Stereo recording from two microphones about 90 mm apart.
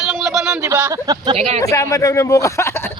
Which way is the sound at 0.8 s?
40° right (ahead or behind).